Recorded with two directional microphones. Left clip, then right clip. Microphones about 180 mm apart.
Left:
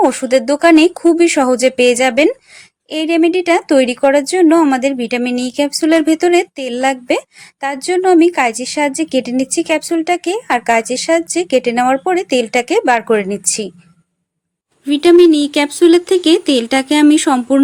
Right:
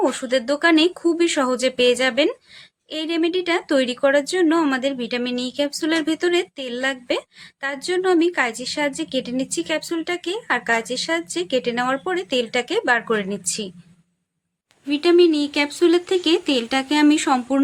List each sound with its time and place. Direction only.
0.0 s speech: 35° left (ahead or behind)
14.8 s speech: 40° left (ahead or behind)